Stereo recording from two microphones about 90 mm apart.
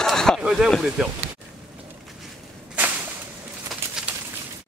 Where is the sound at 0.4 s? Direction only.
5° right (ahead or behind).